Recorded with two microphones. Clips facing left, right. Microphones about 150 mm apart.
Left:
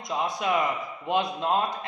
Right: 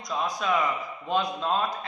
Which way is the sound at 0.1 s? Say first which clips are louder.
Left 1 dB; 20° left (ahead or behind).